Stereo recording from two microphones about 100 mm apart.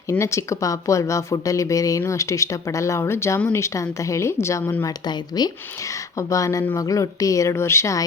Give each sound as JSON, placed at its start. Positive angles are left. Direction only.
{"t": 0.1, "sound": "speech", "side_deg": 30}
{"t": 4.9, "sound": "speech", "side_deg": 45}